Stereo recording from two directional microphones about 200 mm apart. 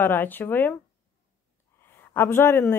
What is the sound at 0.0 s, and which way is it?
Speech, 10° left (ahead or behind).